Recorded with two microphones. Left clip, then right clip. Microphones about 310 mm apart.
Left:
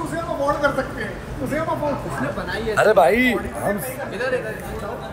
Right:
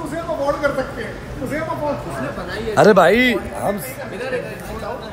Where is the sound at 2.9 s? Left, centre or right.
Right.